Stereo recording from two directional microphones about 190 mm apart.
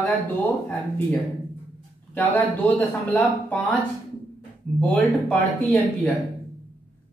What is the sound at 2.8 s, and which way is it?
Speech, 10° left (ahead or behind).